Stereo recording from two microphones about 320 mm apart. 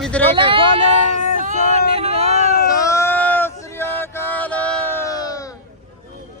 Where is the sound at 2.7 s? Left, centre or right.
Centre.